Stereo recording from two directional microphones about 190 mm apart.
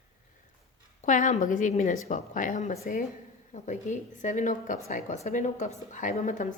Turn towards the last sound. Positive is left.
turn(degrees=40)  # may be behind; listen again after turning